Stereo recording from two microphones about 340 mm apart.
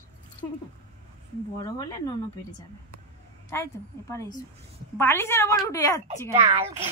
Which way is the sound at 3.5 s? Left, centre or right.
Centre.